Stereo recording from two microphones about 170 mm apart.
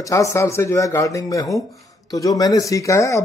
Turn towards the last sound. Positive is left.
turn(degrees=20)  # may be behind; listen again after turning